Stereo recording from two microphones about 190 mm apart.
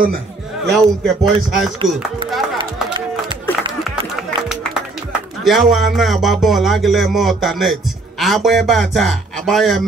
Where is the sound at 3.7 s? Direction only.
Centre (ahead or behind).